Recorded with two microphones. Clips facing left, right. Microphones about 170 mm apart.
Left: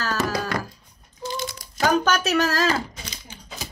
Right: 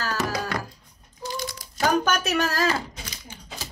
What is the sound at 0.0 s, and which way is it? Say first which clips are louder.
Music: left 2 dB; 15° right (ahead or behind).